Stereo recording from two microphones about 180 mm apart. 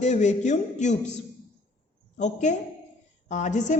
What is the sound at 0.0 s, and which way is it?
Speech, 40° left (ahead or behind).